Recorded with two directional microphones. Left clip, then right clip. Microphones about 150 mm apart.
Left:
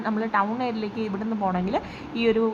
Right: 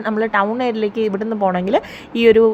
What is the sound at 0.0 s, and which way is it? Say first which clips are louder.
A woman's voice: right 7 dB; 45° right (ahead or behind).